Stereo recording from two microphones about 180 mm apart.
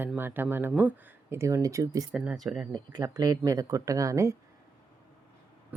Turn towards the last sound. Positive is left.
turn(degrees=-20)  # may be behind; listen again after turning